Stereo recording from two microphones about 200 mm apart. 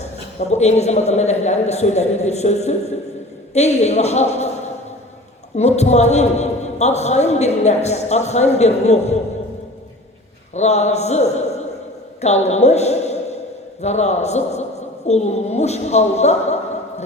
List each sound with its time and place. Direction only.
0.3 s a man's voice: 35° left (ahead or behind)
5.5 s a man's voice: 35° left (ahead or behind)
10.5 s a man's voice: 35° left (ahead or behind)